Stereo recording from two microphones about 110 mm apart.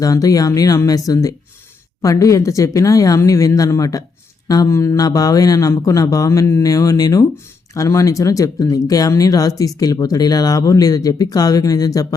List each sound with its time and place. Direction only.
0.0 s speech: 30° left (ahead or behind)